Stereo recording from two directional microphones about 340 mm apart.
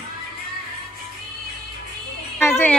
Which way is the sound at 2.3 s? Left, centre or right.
Centre.